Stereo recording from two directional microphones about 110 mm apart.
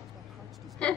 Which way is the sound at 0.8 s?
10° left (ahead or behind).